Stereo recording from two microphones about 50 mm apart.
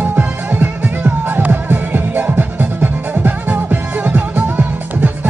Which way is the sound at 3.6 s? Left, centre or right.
Right.